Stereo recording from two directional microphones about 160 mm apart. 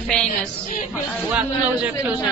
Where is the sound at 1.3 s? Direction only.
10° right (ahead or behind).